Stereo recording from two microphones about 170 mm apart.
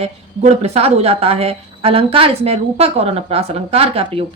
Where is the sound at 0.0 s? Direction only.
40° right (ahead or behind).